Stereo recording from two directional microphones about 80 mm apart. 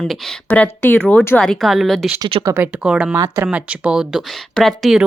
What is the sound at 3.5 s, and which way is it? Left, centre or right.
Speech, centre.